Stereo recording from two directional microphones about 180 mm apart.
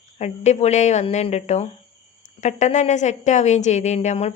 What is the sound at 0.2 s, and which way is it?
A woman's voice, 40° left (ahead or behind).